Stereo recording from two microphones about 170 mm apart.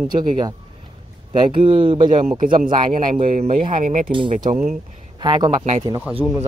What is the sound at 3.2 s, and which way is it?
Speech, 45° right (ahead or behind).